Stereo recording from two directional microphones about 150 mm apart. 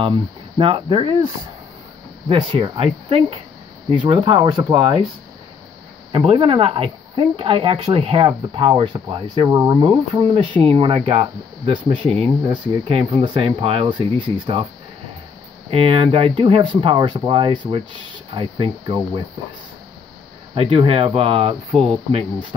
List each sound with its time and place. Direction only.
0.0 s speech: 35° right (ahead or behind)
2.2 s speech: 35° right (ahead or behind)
6.1 s speech: 35° right (ahead or behind)
15.7 s speech: 40° right (ahead or behind)
20.5 s speech: 40° right (ahead or behind)